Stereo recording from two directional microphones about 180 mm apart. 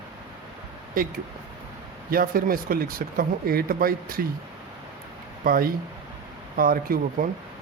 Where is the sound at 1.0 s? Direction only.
50° right (ahead or behind).